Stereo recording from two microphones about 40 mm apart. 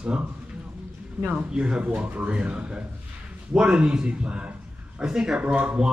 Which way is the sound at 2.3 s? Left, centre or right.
Right.